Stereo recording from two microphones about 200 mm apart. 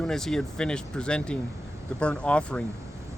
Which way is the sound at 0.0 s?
Centre (ahead or behind).